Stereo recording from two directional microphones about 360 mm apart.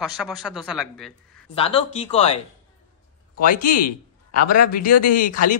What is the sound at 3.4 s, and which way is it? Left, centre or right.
Speech, left.